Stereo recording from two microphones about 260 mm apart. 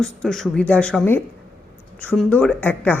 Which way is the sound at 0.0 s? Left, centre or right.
Centre.